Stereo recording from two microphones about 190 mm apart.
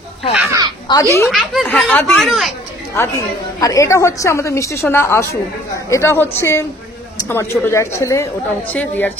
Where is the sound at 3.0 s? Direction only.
10° left (ahead or behind).